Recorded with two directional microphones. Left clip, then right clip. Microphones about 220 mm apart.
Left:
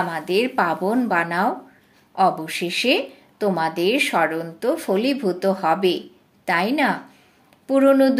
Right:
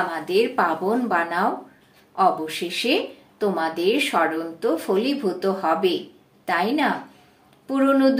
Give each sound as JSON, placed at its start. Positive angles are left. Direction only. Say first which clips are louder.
{"t": 0.1, "sound": "speech", "louder": "even", "side_deg": 40}